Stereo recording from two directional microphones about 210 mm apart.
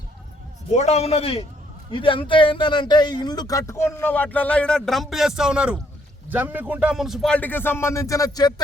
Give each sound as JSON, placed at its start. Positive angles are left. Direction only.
{"t": 0.7, "sound": "a man's voice", "side_deg": 30}